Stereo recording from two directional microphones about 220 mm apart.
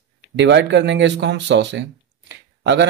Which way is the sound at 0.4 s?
50° right (ahead or behind).